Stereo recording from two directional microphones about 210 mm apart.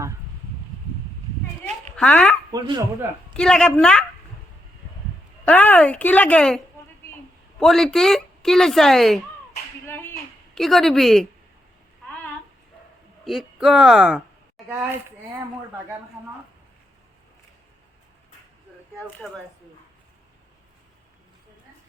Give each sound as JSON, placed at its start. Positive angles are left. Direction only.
{"t": 2.0, "sound": "speech", "side_deg": 5}
{"t": 2.5, "sound": "speech", "side_deg": -20}
{"t": 3.3, "sound": "speech", "side_deg": 5}
{"t": 5.5, "sound": "speech", "side_deg": 10}
{"t": 7.6, "sound": "speech", "side_deg": 0}
{"t": 9.8, "sound": "a sound", "side_deg": 10}
{"t": 13.2, "sound": "speech", "side_deg": 0}
{"t": 14.6, "sound": "a sound", "side_deg": 0}